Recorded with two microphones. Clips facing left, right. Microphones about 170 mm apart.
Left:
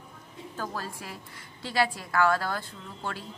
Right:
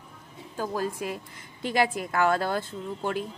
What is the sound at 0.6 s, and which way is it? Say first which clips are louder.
A woman's voice: right 7 dB; 15° right (ahead or behind).